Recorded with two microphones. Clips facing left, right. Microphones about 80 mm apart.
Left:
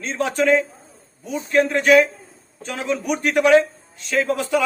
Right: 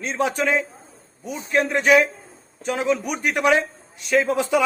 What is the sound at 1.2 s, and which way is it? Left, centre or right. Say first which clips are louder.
A man's voice: left 3 dB; centre.